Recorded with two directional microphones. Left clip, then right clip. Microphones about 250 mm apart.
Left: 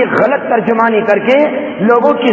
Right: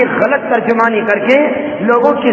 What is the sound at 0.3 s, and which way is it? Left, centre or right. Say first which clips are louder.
A man's voice: even; left.